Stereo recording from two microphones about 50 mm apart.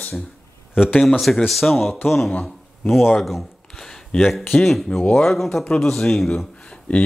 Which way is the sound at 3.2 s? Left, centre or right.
Centre.